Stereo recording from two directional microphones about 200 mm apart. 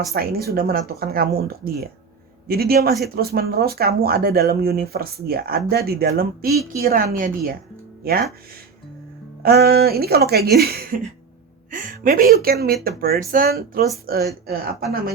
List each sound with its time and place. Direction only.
0.1 s speech: 50° right (ahead or behind)
9.4 s speech: 50° right (ahead or behind)